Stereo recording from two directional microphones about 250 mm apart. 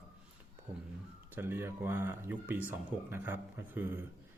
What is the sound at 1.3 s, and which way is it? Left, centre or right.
Speech, centre.